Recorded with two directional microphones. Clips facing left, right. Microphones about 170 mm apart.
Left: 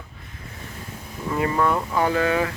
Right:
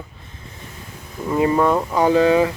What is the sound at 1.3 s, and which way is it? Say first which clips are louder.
Speech: right 5 dB; 20° right (ahead or behind).